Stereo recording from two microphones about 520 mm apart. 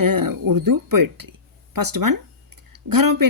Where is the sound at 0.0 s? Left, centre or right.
Right.